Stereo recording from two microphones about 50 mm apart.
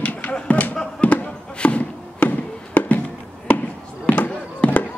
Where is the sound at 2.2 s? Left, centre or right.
Left.